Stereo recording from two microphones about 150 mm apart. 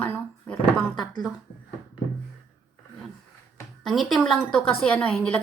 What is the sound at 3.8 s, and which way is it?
A woman's voice, centre (ahead or behind).